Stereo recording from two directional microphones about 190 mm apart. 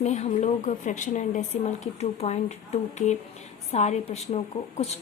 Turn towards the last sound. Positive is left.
turn(degrees=35)  # may be behind; listen again after turning